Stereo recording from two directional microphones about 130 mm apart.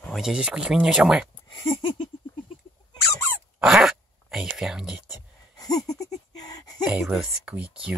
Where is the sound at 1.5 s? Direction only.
40° left (ahead or behind).